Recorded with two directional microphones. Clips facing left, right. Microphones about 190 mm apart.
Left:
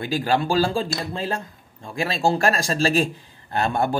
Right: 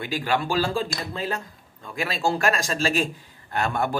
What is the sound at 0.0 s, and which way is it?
Speech, 35° left (ahead or behind).